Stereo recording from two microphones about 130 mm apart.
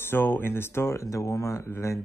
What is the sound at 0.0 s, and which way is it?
Speech, 15° left (ahead or behind).